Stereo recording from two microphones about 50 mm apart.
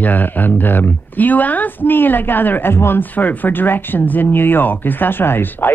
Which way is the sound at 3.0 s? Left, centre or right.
Left.